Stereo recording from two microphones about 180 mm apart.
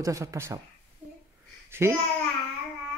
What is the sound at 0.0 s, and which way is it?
Speech, 15° right (ahead or behind).